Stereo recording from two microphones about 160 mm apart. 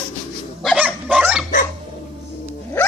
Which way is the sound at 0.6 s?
10° right (ahead or behind).